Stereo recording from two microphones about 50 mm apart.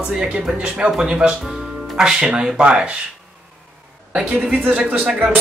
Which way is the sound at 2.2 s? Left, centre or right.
Centre.